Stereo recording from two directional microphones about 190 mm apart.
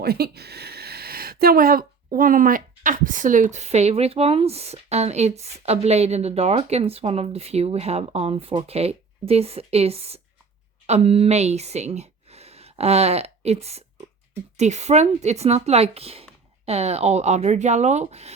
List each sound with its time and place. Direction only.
0.0 s speech: 55° right (ahead or behind); by 18.3 s 35° right (ahead or behind)